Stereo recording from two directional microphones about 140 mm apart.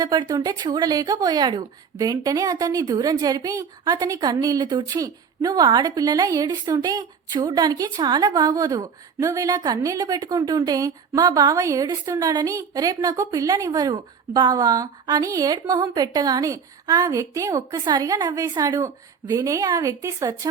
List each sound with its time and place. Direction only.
0.0 s a woman's voice: 30° right (ahead or behind)